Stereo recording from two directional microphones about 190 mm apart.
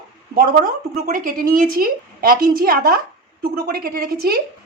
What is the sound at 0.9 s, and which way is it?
A woman's voice, 45° right (ahead or behind).